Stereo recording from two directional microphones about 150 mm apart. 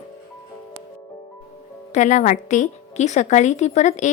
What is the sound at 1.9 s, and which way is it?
A woman's voice, 55° left (ahead or behind).